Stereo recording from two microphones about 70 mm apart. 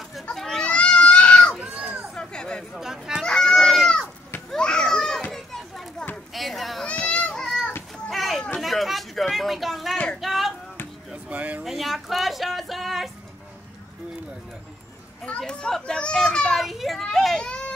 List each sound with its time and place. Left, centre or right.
0.4 s children playing: centre
1.6 s children playing: centre
2.1 s a sound: centre
2.7 s a sound: centre
3.2 s run: centre
4.5 s children playing: centre
6.9 s children playing: centre
8.1 s a sound: centre
11.2 s a sound: right
11.6 s music: centre
15.2 s children playing: centre
17.5 s baby cry: centre